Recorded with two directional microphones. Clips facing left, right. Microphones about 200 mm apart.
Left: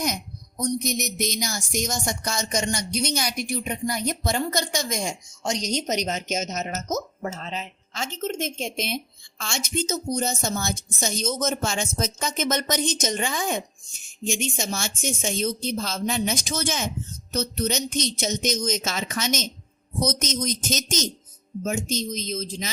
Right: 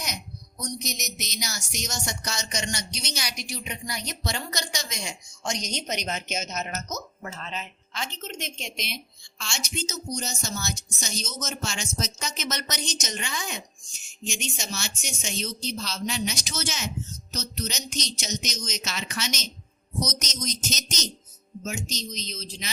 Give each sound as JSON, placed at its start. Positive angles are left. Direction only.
{"t": 0.6, "sound": "a man's voice", "side_deg": 55}